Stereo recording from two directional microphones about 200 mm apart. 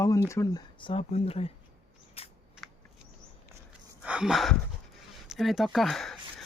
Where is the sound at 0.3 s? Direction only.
15° left (ahead or behind).